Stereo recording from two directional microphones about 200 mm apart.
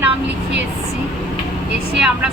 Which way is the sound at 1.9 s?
5° right (ahead or behind).